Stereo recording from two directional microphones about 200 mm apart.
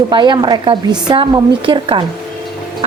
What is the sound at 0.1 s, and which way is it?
A woman's voice, 20° right (ahead or behind).